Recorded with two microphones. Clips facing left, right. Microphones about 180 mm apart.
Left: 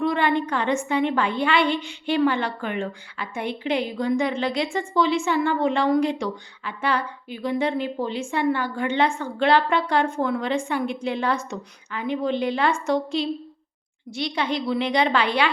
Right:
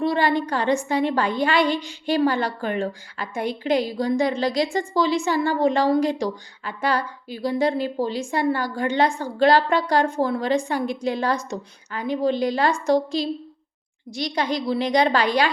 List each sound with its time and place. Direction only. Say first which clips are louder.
0.0 s a woman's voice: right 1 dB; 35° right (ahead or behind)